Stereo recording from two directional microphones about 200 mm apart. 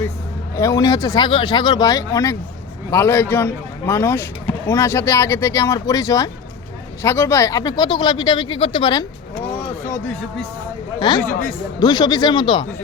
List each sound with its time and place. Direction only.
0.5 s speech: 15° left (ahead or behind)
11.0 s speech: 20° left (ahead or behind)